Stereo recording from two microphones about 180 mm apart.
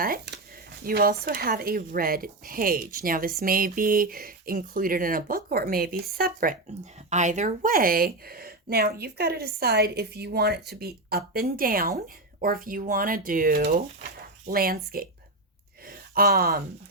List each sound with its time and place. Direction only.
0.8 s speech: 55° right (ahead or behind)
7.1 s speech: 40° right (ahead or behind); by 16.6 s 60° right (ahead or behind)